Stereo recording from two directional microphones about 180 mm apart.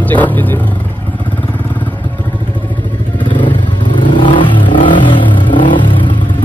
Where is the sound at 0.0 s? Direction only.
10° left (ahead or behind).